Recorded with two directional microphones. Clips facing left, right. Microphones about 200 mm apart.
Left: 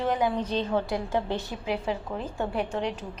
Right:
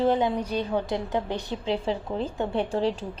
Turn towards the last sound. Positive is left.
turn(degrees=-30)  # may be behind; listen again after turning